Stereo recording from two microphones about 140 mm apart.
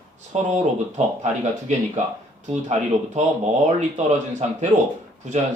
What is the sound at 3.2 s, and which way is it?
Speech, 55° right (ahead or behind).